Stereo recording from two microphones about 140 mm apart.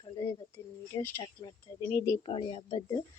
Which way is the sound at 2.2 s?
40° left (ahead or behind).